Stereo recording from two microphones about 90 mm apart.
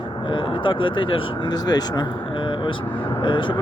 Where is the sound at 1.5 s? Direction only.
50° left (ahead or behind).